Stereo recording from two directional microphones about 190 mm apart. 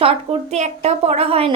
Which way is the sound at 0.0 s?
30° right (ahead or behind).